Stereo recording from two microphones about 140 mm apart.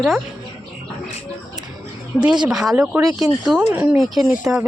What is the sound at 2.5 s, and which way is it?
Speech, 5° right (ahead or behind).